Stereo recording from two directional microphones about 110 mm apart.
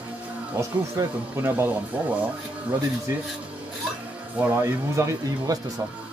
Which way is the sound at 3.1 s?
30° right (ahead or behind).